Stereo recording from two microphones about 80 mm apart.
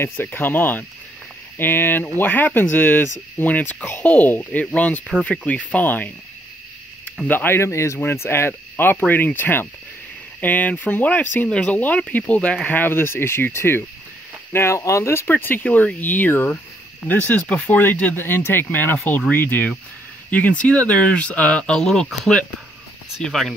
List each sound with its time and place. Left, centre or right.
0.2 s speech: left
7.2 s speech: left
17.5 s speech: centre
23.2 s speech: centre